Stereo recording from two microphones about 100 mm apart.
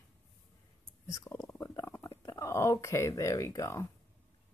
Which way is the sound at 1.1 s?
30° left (ahead or behind).